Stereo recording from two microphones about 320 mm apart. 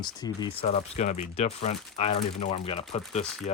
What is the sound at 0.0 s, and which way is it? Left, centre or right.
Speech, centre.